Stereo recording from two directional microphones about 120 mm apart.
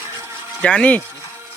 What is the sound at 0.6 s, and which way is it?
Speech, 10° left (ahead or behind).